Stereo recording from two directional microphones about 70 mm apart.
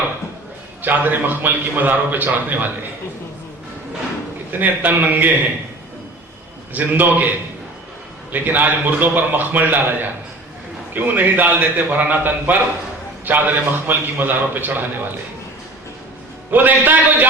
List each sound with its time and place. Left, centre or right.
0.8 s a man's voice: right
4.6 s a man's voice: right
6.7 s a man's voice: right
8.3 s a man's voice: right
16.5 s a man's voice: right